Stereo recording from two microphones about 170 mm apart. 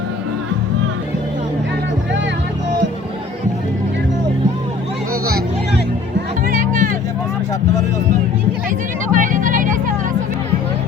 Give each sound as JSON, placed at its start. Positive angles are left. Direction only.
{"t": 6.5, "sound": "music", "side_deg": -50}
{"t": 9.1, "sound": "music", "side_deg": -50}